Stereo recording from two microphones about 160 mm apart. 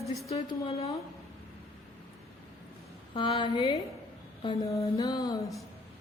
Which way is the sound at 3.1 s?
30° left (ahead or behind).